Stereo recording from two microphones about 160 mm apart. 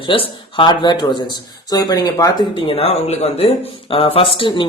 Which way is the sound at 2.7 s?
35° left (ahead or behind).